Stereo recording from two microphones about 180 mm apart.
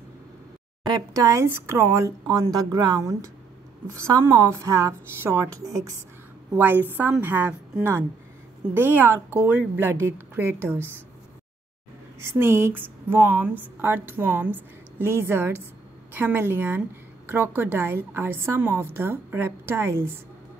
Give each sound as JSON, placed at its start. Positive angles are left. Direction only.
{"t": 0.8, "sound": "speech", "side_deg": -20}
{"t": 12.2, "sound": "speech", "side_deg": -15}